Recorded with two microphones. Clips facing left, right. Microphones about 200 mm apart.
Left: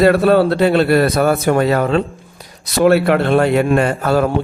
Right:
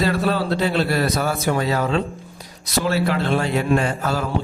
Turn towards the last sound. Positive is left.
turn(degrees=60)  # may be behind; listen again after turning